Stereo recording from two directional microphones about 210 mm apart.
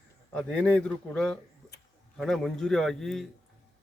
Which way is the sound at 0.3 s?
5° left (ahead or behind).